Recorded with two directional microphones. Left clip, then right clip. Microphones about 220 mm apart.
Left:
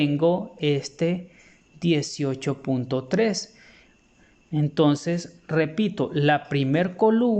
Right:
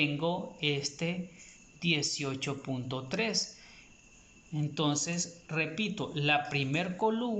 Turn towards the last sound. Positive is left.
turn(degrees=30)  # may be behind; listen again after turning